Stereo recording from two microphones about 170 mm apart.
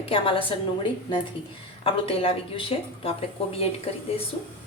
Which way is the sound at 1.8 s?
35° left (ahead or behind).